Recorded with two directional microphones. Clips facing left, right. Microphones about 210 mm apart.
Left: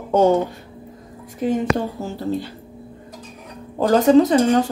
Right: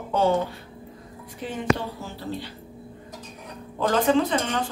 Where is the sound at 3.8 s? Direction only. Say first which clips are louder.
Left 8 dB; 40° left (ahead or behind).